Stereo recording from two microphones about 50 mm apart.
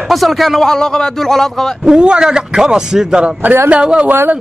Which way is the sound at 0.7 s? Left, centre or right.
Centre.